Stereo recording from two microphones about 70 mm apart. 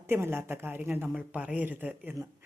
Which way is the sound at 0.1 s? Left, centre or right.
Right.